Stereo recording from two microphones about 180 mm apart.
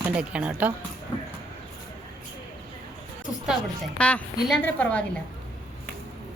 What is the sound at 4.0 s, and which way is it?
A woman's voice, 5° left (ahead or behind).